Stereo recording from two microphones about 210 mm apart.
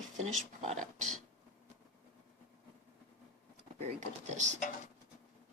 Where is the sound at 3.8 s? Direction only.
35° right (ahead or behind).